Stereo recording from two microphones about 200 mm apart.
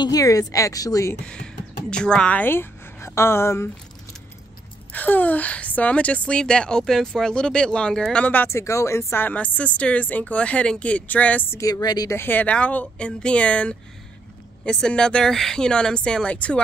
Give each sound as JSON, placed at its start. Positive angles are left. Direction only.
{"t": 0.0, "sound": "a woman's voice", "side_deg": 15}
{"t": 1.2, "sound": "speech", "side_deg": 5}
{"t": 4.9, "sound": "a woman's voice", "side_deg": 10}